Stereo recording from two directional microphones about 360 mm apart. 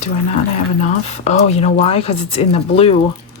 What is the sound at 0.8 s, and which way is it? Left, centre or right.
Speech, centre.